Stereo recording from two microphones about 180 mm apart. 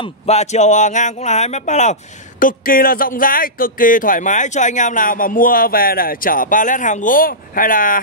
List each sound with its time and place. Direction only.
0.0 s speech: 35° left (ahead or behind)
2.4 s speech: 50° left (ahead or behind)